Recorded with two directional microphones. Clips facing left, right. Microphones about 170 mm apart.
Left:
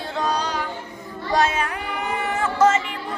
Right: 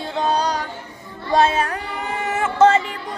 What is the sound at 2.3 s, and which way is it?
Music, 25° right (ahead or behind).